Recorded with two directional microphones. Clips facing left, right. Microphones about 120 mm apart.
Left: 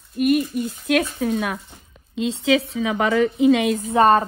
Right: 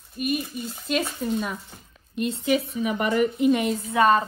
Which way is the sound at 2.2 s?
90° left.